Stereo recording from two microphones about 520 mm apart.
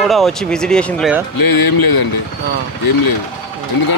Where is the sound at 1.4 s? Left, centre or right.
Left.